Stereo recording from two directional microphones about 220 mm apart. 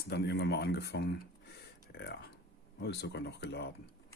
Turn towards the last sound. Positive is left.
turn(degrees=50)  # may be behind; listen again after turning